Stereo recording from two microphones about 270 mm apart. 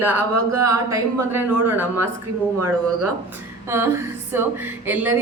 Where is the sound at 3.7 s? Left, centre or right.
Centre.